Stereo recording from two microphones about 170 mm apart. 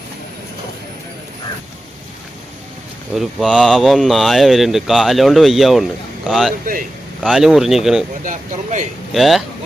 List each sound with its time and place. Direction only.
3.2 s speech: 5° right (ahead or behind)
8.2 s speech: 45° right (ahead or behind)
9.1 s speech: centre (ahead or behind)